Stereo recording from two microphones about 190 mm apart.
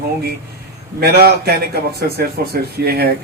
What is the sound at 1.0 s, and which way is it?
A man's voice, 55° right (ahead or behind).